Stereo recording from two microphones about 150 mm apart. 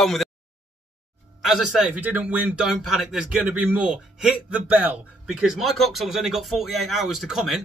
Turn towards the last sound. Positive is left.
turn(degrees=0)  # may be behind; listen again after turning